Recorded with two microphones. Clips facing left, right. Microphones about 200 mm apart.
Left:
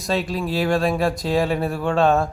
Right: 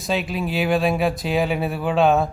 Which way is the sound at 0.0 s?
Centre (ahead or behind).